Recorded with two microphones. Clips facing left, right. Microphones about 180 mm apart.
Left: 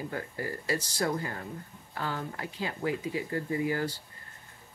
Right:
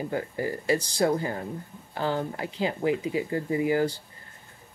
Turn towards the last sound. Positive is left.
turn(degrees=-20)  # may be behind; listen again after turning